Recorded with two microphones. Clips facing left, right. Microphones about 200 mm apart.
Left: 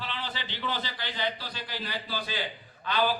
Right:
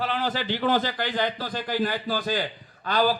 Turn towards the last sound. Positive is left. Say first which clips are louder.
# right 5 dB
turn(degrees=-40)  # may be behind; listen again after turning